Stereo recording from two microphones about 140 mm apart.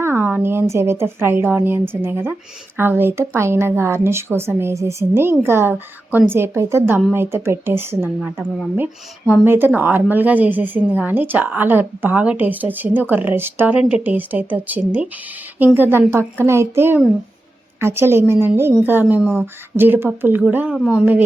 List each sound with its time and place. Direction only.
0.0 s a woman's voice: 15° right (ahead or behind)